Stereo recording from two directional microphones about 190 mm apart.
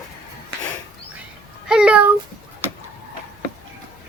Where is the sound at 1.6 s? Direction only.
5° right (ahead or behind).